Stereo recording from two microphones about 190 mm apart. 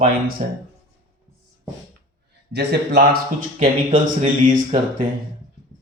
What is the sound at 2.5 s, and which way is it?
Speech, 60° right (ahead or behind).